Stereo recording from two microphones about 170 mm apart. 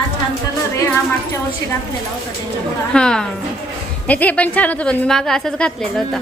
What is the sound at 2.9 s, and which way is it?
A woman's voice, 5° left (ahead or behind).